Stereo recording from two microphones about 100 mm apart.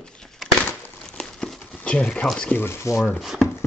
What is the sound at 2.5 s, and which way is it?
Speech, 25° left (ahead or behind).